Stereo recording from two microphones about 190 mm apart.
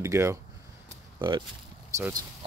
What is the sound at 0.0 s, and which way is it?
Speech, 15° right (ahead or behind).